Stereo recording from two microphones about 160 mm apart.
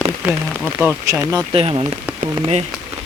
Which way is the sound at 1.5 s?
35° right (ahead or behind).